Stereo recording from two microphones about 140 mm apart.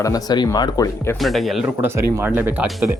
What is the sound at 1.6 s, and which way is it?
Speech, 15° right (ahead or behind).